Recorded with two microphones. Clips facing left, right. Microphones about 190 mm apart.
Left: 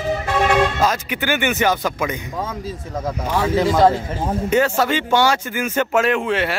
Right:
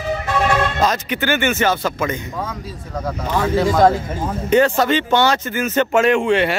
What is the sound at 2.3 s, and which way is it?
Speech, 25° left (ahead or behind).